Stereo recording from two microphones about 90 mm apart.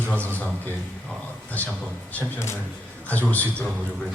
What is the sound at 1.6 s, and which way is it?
Speech, 15° left (ahead or behind).